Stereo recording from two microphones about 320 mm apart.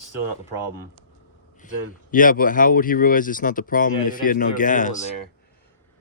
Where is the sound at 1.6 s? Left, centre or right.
Left.